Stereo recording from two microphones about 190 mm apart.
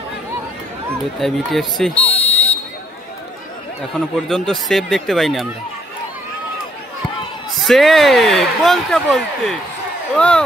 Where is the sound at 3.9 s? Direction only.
Centre (ahead or behind).